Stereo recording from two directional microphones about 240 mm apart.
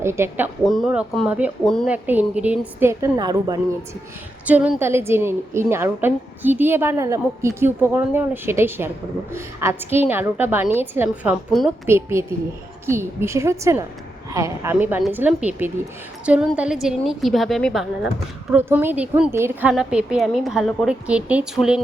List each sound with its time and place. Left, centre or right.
0.0 s a woman's voice: centre